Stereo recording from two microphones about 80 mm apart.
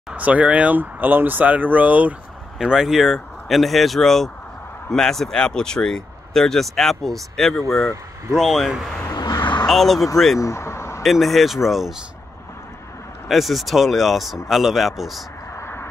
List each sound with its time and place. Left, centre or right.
0.1 s speech: centre
2.6 s speech: centre
9.1 s a sound: left
9.7 s speech: centre
10.4 s vehicle: left
11.0 s speech: centre
13.3 s speech: centre
15.5 s vehicle: left